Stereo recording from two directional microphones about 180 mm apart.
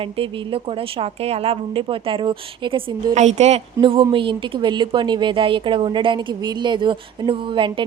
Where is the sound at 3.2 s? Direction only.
40° right (ahead or behind).